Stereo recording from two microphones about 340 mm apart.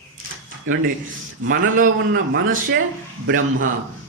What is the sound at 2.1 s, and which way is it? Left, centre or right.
A man's voice, right.